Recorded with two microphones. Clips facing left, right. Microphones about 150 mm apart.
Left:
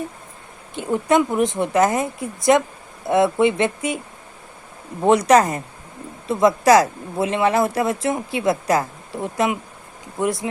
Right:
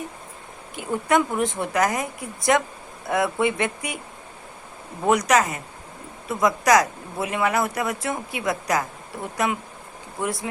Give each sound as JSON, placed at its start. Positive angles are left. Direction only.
{"t": 0.8, "sound": "speech", "side_deg": 20}
{"t": 5.0, "sound": "speech", "side_deg": 30}